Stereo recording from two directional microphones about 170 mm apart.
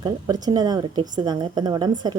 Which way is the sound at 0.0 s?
25° right (ahead or behind).